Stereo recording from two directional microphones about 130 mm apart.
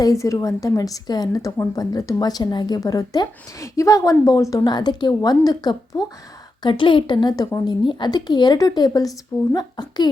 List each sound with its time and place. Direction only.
0.0 s a woman's voice: 25° left (ahead or behind)